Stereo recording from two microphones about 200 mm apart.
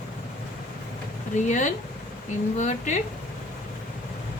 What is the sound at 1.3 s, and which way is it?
Speech, 40° left (ahead or behind).